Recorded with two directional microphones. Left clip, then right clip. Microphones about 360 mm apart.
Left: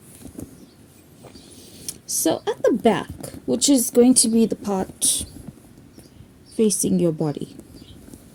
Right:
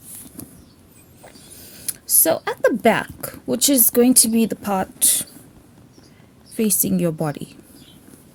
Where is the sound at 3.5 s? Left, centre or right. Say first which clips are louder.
Even; right.